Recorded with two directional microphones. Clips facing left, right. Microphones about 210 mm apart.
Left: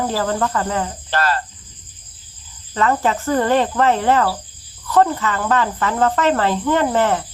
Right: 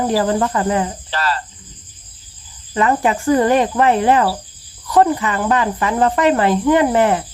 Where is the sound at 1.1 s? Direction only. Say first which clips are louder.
Left 3 dB; 50° left (ahead or behind).